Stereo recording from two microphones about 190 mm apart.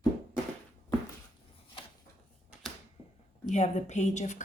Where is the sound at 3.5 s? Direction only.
35° left (ahead or behind).